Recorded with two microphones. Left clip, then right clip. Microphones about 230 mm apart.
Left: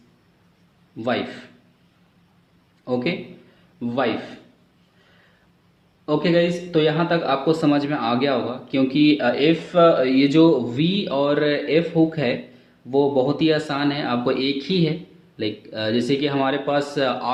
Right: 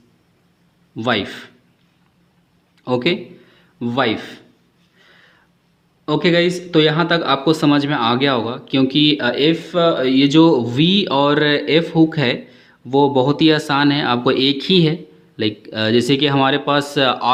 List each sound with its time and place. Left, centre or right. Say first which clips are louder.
0.9 s speech: right 5 dB; right
2.8 s speech: right 6 dB; right
6.1 s speech: right 3 dB; right